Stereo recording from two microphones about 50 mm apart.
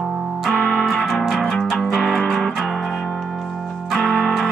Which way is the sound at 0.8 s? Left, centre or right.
Centre.